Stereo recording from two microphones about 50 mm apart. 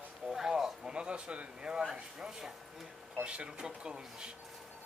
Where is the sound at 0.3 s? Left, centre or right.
Centre.